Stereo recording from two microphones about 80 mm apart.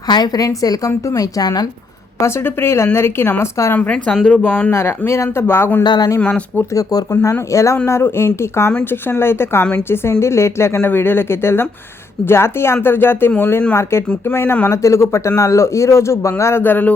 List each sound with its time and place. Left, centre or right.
0.1 s a woman's voice: left
2.2 s speech: left
3.8 s a woman's voice: centre
4.4 s speech: centre
4.7 s speech: left
5.8 s speech: left
6.1 s speech: centre
7.1 s speech: left